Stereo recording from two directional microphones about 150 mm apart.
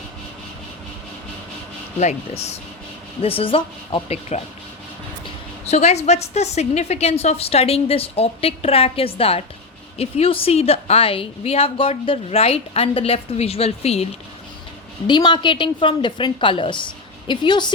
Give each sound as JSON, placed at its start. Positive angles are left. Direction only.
{"t": 2.0, "sound": "a woman's voice", "side_deg": 50}
{"t": 5.6, "sound": "a woman's voice", "side_deg": 45}
{"t": 15.0, "sound": "a woman's voice", "side_deg": 30}